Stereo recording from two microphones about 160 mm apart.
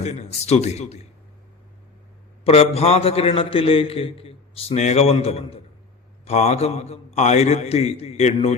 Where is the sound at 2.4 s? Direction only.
40° left (ahead or behind).